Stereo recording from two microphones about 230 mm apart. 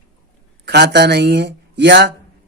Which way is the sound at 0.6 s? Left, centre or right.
Right.